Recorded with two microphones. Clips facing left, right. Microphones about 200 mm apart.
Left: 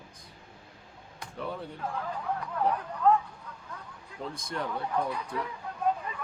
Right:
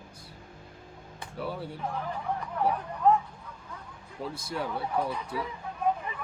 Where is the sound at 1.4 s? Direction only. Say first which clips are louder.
Right 1 dB; 5° right (ahead or behind).